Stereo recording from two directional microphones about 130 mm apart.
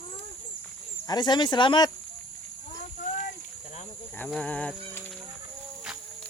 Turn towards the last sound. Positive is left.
turn(degrees=10)  # may be behind; listen again after turning